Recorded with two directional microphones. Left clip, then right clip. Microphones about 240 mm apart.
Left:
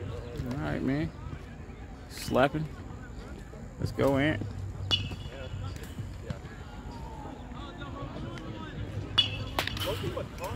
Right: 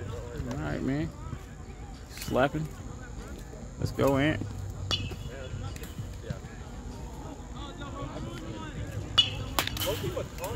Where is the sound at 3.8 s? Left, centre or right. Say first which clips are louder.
Right 1 dB; centre.